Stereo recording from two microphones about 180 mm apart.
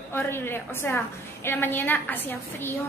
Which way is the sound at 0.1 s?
10° left (ahead or behind).